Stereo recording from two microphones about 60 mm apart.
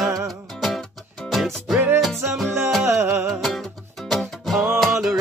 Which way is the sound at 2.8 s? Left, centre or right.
Right.